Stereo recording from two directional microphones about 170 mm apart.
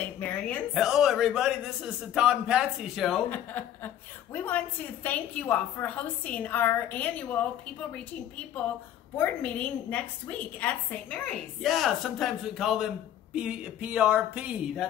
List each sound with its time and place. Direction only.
0.0 s a woman's voice: 10° left (ahead or behind)
0.7 s a woman's voice: centre (ahead or behind)
3.3 s a woman's voice: 10° left (ahead or behind)
9.1 s a woman's voice: 10° left (ahead or behind); by 14.9 s 5° right (ahead or behind)